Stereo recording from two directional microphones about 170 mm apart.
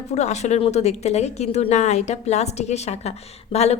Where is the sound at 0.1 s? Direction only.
40° left (ahead or behind).